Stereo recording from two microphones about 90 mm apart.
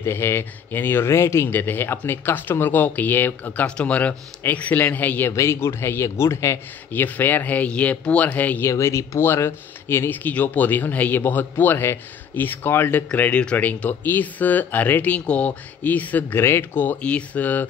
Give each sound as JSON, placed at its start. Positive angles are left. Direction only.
{"t": 0.0, "sound": "speech", "side_deg": 25}
{"t": 5.3, "sound": "speech", "side_deg": 30}
{"t": 6.9, "sound": "speech", "side_deg": 20}
{"t": 8.6, "sound": "speech", "side_deg": 30}
{"t": 13.1, "sound": "speech", "side_deg": 15}